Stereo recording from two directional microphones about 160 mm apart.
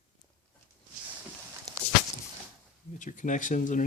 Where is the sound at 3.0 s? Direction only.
55° left (ahead or behind).